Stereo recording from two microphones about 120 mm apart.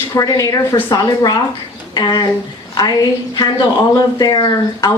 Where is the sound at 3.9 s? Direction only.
35° left (ahead or behind).